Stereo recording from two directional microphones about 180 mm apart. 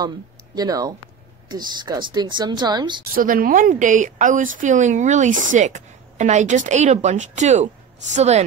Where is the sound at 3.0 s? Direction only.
50° right (ahead or behind).